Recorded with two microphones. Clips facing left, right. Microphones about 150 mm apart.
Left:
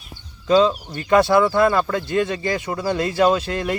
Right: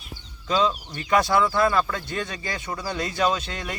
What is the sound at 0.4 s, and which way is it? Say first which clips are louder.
Speech: left 7 dB; 40° left (ahead or behind).